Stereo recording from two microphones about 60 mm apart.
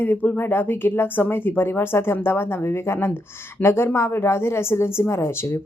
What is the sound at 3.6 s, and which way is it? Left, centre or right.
A woman's voice, left.